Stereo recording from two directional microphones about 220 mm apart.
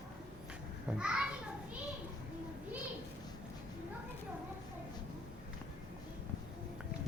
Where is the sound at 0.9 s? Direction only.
5° right (ahead or behind).